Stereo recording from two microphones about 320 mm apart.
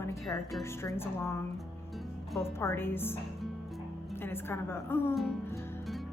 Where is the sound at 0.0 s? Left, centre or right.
Centre.